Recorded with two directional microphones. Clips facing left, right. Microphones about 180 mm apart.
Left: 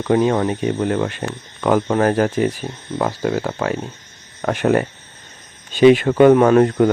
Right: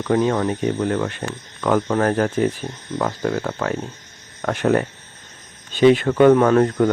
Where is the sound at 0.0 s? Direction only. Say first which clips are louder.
Left 2 dB; 20° left (ahead or behind).